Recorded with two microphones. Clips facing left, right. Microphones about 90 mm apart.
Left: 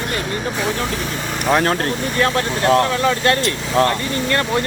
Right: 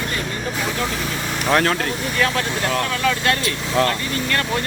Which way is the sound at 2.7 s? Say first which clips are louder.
Left 8 dB; 30° left (ahead or behind).